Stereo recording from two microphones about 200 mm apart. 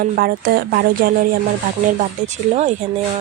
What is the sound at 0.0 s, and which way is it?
Speech, 45° right (ahead or behind).